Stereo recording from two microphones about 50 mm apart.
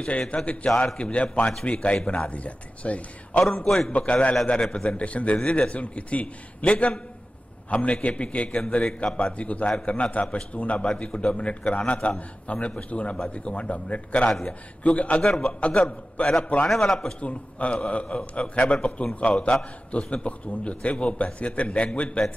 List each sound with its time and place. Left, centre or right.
0.3 s a man's voice: centre
3.4 s a man's voice: centre
3.9 s a man's voice: left
8.5 s a man's voice: centre
15.2 s a man's voice: centre
16.2 s a man's voice: left
16.6 s a man's voice: centre
17.2 s a man's voice: left